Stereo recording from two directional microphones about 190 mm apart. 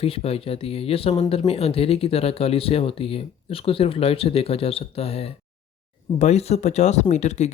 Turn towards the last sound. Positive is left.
turn(degrees=35)  # may be behind; listen again after turning